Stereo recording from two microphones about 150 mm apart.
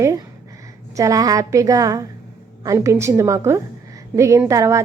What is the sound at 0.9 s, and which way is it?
A woman's voice, 20° right (ahead or behind).